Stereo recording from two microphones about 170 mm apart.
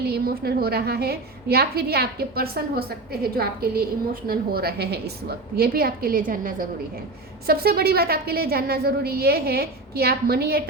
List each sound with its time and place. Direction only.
0.0 s a woman's voice: 65° right (ahead or behind)
7.4 s a woman's voice: 65° right (ahead or behind)